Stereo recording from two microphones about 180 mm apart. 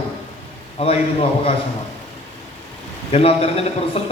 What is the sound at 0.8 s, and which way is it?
Speech, 35° left (ahead or behind).